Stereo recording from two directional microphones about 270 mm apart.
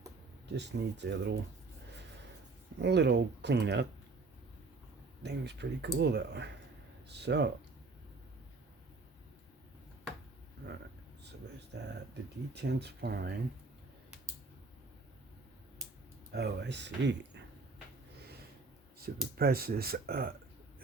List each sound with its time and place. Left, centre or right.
0.5 s speech: right
2.7 s speech: right
5.2 s speech: right
10.6 s a sound: right
11.7 s speech: right
16.3 s speech: right
18.9 s speech: right